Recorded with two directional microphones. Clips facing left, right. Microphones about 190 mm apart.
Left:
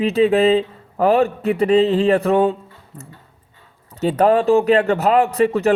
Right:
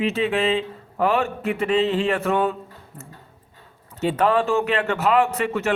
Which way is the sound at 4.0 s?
40° left (ahead or behind).